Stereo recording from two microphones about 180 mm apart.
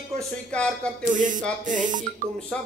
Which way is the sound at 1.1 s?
45° right (ahead or behind).